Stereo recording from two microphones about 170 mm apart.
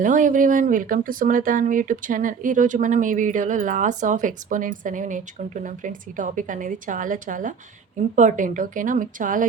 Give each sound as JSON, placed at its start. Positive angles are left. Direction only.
{"t": 0.0, "sound": "speech", "side_deg": -50}